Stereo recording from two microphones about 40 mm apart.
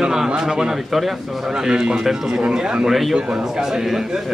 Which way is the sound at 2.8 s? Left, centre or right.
Centre.